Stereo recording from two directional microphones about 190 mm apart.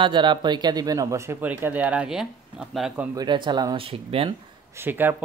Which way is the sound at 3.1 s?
25° right (ahead or behind).